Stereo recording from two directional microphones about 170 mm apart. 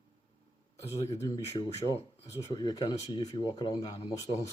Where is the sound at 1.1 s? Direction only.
20° left (ahead or behind).